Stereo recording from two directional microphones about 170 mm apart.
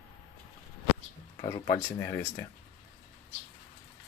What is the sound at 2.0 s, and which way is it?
Speech, 15° left (ahead or behind).